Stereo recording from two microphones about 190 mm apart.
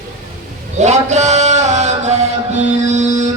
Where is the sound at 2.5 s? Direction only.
35° right (ahead or behind).